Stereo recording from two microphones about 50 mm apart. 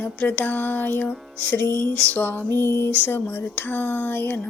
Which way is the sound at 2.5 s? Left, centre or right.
Left.